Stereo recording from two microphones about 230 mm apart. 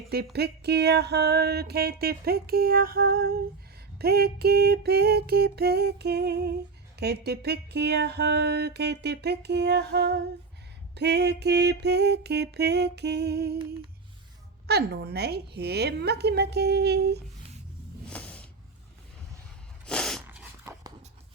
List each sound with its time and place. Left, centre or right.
0.3 s music: right
14.7 s music: right
18.1 s a sound: centre
19.8 s sneeze: centre
20.2 s dog: centre